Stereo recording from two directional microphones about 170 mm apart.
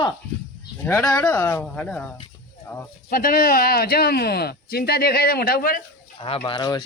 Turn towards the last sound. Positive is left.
turn(degrees=25)  # may be behind; listen again after turning